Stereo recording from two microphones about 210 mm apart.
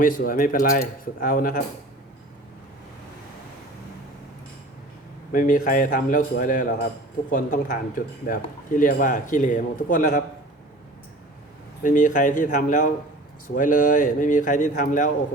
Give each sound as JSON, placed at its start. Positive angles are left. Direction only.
{"t": 0.0, "sound": "speech", "side_deg": 40}
{"t": 5.3, "sound": "speech", "side_deg": 40}
{"t": 11.8, "sound": "speech", "side_deg": 40}